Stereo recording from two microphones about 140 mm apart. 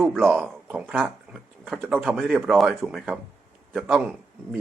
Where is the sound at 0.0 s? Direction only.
Centre (ahead or behind).